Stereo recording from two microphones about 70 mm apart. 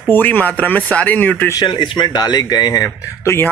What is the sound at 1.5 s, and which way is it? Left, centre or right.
Speech, left.